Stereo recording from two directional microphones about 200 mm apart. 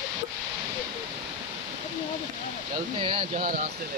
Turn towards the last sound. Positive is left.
turn(degrees=-50)  # may be behind; listen again after turning